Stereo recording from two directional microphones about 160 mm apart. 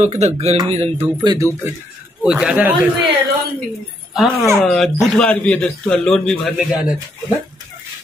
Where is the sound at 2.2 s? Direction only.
5° right (ahead or behind).